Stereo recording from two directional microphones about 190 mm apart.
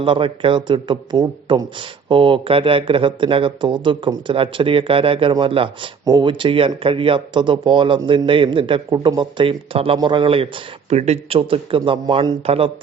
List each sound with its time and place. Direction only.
0.0 s a man's voice: 25° right (ahead or behind)